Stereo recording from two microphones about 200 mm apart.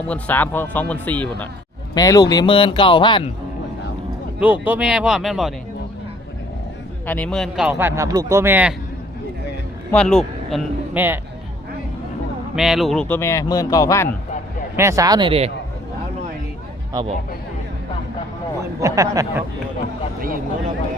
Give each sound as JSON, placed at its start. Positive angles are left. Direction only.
{"t": 0.1, "sound": "a man's voice", "side_deg": 5}
{"t": 2.0, "sound": "speech", "side_deg": 20}
{"t": 4.4, "sound": "speech", "side_deg": -10}
{"t": 7.1, "sound": "speech", "side_deg": 5}
{"t": 9.9, "sound": "speech", "side_deg": 5}
{"t": 10.9, "sound": "speech", "side_deg": -10}
{"t": 12.5, "sound": "a man's voice", "side_deg": 0}
{"t": 14.8, "sound": "speech", "side_deg": -15}
{"t": 16.9, "sound": "speech", "side_deg": -25}
{"t": 18.8, "sound": "speech", "side_deg": -15}